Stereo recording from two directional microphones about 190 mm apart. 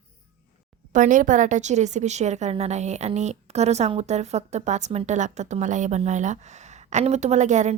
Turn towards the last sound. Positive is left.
turn(degrees=-40)  # may be behind; listen again after turning